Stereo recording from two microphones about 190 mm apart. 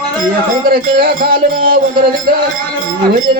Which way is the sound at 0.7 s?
50° right (ahead or behind).